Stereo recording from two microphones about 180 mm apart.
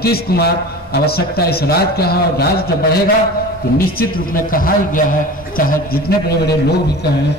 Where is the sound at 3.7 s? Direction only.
55° left (ahead or behind).